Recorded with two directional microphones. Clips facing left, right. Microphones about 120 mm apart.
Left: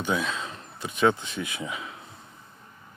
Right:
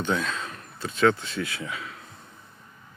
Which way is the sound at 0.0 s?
10° left (ahead or behind).